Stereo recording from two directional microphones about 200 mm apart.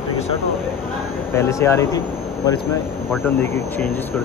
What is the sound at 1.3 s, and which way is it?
Speech, 15° left (ahead or behind).